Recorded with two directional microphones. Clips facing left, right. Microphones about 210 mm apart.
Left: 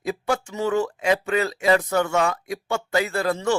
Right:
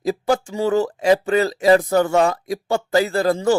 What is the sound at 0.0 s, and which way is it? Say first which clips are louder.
Speech: right 5 dB; 35° right (ahead or behind).